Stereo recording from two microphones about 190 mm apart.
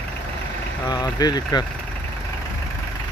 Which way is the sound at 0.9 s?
20° left (ahead or behind).